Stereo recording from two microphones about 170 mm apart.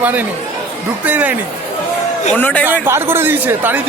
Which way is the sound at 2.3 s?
10° left (ahead or behind).